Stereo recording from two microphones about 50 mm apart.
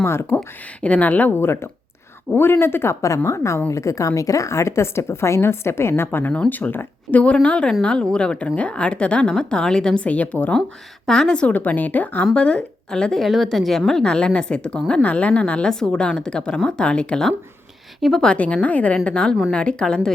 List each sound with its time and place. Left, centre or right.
0.0 s a woman's voice: left
0.8 s speech: left
1.3 s a woman's voice: left
6.1 s speech: left
7.1 s a woman's voice: left
10.0 s a woman's voice: left
11.0 s a woman's voice: centre
11.4 s speech: left
12.3 s a woman's voice: left; by 13.7 s centre
13.7 s a woman's voice: centre
18.0 s a woman's voice: centre
18.3 s a woman's voice: left